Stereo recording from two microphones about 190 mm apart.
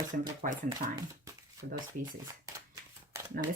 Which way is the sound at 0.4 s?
45° right (ahead or behind).